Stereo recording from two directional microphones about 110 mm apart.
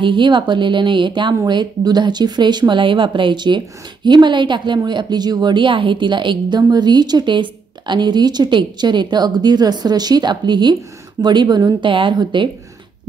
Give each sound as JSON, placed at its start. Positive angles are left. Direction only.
{"t": 0.0, "sound": "speech", "side_deg": -45}